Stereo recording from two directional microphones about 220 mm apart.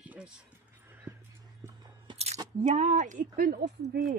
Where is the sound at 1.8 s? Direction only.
25° right (ahead or behind).